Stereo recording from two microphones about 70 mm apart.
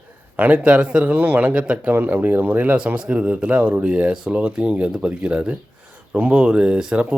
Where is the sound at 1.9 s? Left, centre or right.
Right.